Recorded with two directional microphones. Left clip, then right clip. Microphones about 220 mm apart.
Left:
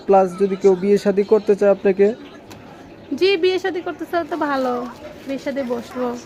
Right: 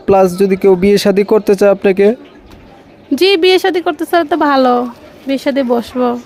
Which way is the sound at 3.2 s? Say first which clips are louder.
Right 8 dB; 50° right (ahead or behind).